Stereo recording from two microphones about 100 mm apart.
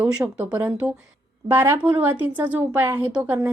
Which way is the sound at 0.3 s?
15° right (ahead or behind).